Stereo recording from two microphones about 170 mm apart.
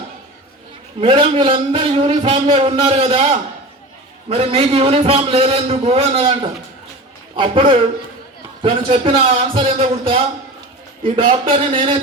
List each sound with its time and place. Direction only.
1.0 s a man's voice: 35° right (ahead or behind)